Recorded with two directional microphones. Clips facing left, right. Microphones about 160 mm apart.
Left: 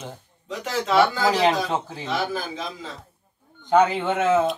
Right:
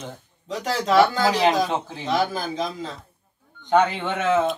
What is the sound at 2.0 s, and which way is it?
Speech, 40° right (ahead or behind).